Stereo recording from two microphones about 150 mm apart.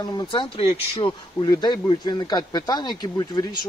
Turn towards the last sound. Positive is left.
turn(degrees=25)  # may be behind; listen again after turning